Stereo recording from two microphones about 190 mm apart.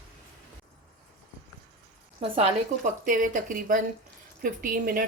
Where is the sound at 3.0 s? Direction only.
45° right (ahead or behind).